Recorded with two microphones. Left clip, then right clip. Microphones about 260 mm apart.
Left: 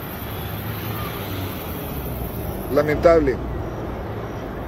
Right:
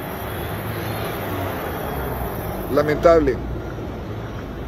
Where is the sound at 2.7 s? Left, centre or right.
Centre.